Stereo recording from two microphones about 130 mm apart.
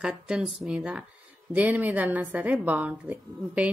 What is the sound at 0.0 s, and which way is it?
A woman's voice, 5° right (ahead or behind).